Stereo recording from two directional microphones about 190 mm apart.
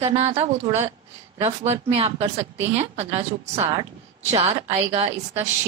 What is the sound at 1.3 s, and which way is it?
A woman's voice, 35° right (ahead or behind).